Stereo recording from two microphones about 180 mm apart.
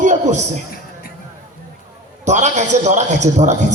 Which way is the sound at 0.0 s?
40° right (ahead or behind).